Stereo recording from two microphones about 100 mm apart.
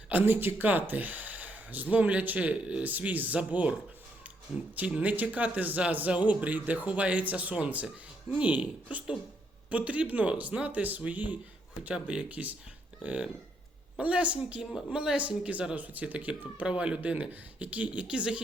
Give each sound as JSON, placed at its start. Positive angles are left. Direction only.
{"t": 0.1, "sound": "speech", "side_deg": -20}
{"t": 4.8, "sound": "speech", "side_deg": -15}